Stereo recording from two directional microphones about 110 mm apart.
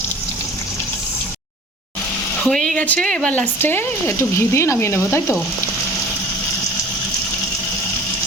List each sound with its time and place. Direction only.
2.4 s speech: 5° left (ahead or behind); by 5.4 s 25° left (ahead or behind)